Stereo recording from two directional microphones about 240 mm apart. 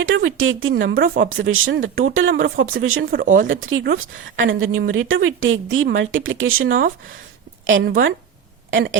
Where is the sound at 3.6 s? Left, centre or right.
Right.